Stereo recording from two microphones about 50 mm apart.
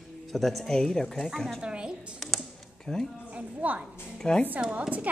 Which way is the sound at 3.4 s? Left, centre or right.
Right.